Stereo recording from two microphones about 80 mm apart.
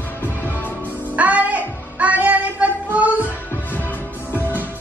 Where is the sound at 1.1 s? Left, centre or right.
Centre.